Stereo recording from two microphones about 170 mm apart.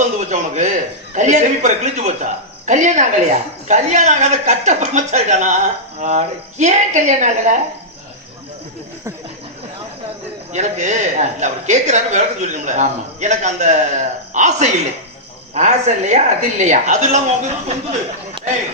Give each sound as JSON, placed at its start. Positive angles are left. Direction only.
{"t": 0.0, "sound": "a sound", "side_deg": -45}
{"t": 1.1, "sound": "a man's voice", "side_deg": -45}
{"t": 10.5, "sound": "a man's voice", "side_deg": -45}